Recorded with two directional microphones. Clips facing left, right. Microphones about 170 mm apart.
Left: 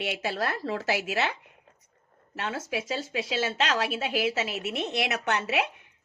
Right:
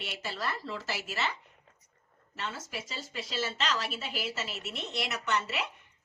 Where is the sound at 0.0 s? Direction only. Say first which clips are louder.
Left 7 dB; 60° left (ahead or behind).